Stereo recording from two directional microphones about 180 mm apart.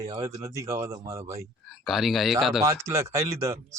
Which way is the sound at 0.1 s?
20° right (ahead or behind).